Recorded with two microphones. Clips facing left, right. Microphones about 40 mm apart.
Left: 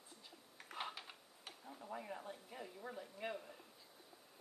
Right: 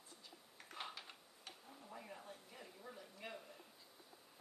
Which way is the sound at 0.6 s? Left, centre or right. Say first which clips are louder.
Left 3 dB; centre.